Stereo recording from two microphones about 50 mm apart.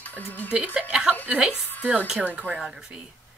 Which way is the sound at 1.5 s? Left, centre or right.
Left.